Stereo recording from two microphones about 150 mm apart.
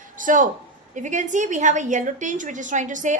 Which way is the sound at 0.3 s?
60° right (ahead or behind).